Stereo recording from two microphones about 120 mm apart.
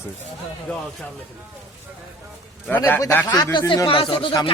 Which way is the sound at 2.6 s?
15° left (ahead or behind).